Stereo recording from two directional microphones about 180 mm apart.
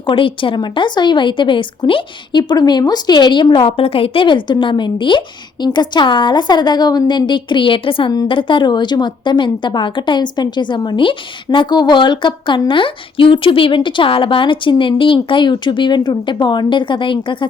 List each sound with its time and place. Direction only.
0.0 s a woman's voice: 30° left (ahead or behind)